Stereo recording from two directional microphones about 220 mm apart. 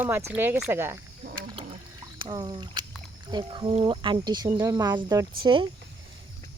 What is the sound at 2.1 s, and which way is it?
Speech, 20° right (ahead or behind).